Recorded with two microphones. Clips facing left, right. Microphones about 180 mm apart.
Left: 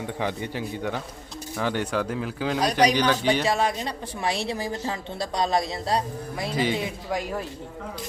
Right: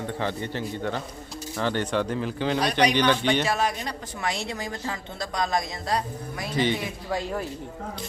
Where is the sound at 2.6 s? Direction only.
40° left (ahead or behind).